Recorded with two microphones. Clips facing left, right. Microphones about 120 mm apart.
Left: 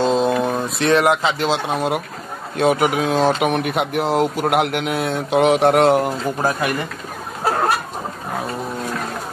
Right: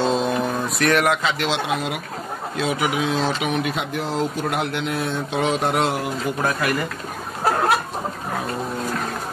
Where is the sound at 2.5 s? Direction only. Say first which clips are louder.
Left 6 dB; 50° left (ahead or behind).